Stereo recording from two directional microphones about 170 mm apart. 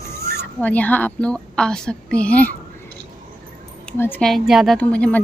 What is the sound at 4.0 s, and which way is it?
Speech, 10° left (ahead or behind).